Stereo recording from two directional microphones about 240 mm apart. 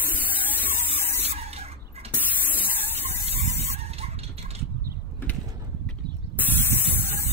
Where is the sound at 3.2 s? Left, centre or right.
Right.